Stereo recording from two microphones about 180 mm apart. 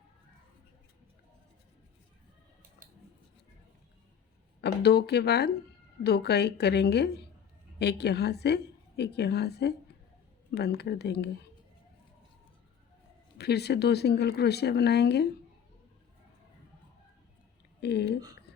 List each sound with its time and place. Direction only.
4.6 s a woman's voice: 65° left (ahead or behind)
13.4 s a woman's voice: 65° left (ahead or behind)
17.7 s speech: 65° left (ahead or behind)